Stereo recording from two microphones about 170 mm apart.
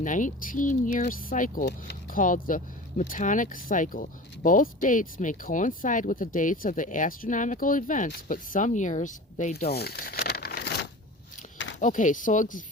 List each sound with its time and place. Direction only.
0.0 s speech: 50° left (ahead or behind)
1.6 s speech: 75° left (ahead or behind)
2.1 s speech: 50° left (ahead or behind)
9.6 s crumpling: 70° left (ahead or behind)
11.5 s a sound: 90° left
11.8 s speech: 50° left (ahead or behind)